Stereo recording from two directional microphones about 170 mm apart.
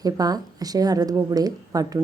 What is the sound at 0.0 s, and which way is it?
A woman's voice, 20° right (ahead or behind).